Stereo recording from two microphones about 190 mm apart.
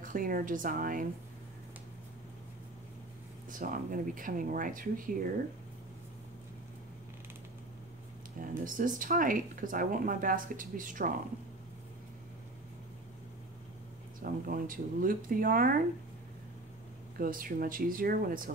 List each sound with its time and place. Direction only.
0.0 s speech: 45° right (ahead or behind)
3.4 s speech: 45° right (ahead or behind)
8.6 s speech: 45° right (ahead or behind)
14.2 s speech: 50° right (ahead or behind)
17.2 s speech: 50° right (ahead or behind)